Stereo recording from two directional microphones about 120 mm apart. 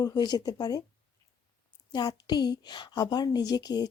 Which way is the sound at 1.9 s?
35° left (ahead or behind).